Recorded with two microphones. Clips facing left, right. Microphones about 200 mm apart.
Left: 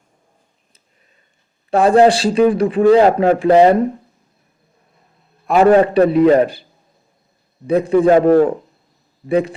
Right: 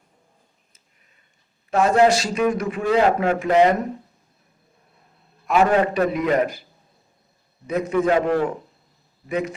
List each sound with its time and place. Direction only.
1.7 s a man's voice: 30° left (ahead or behind)
5.5 s a man's voice: 35° left (ahead or behind)
7.7 s a man's voice: 30° left (ahead or behind)